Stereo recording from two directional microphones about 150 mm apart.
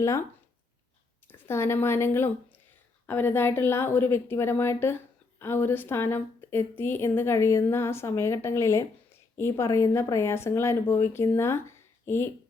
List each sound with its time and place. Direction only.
1.3 s a woman's voice: 15° left (ahead or behind)